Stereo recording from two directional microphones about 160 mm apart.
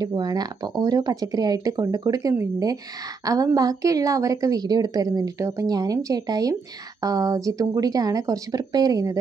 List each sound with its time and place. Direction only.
0.0 s a woman's voice: 25° right (ahead or behind)